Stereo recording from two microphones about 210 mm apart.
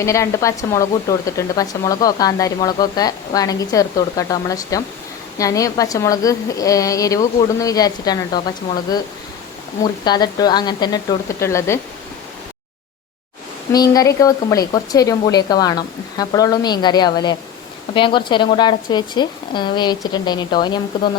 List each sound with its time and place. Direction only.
0.0 s a woman's voice: 15° left (ahead or behind)
13.7 s a woman's voice: 15° left (ahead or behind)